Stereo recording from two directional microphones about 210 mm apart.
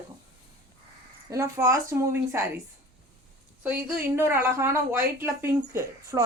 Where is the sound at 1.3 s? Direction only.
15° right (ahead or behind).